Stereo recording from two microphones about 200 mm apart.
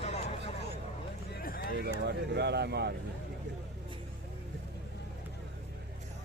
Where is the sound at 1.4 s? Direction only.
45° left (ahead or behind).